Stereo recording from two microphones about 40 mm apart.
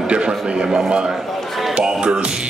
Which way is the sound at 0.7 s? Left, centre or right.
Right.